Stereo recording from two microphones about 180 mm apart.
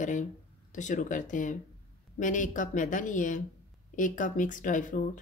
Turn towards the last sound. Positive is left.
turn(degrees=45)  # may be behind; listen again after turning